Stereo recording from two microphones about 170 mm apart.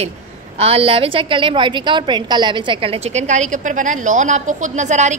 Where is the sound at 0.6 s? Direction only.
35° right (ahead or behind).